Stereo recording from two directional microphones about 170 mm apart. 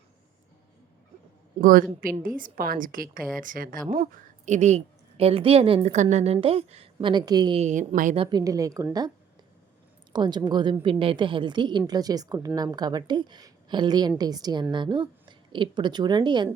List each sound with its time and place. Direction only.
1.6 s a woman's voice: 55° right (ahead or behind); by 7.6 s 25° right (ahead or behind)
7.6 s speech: 45° right (ahead or behind)
8.1 s a woman's voice: 30° right (ahead or behind)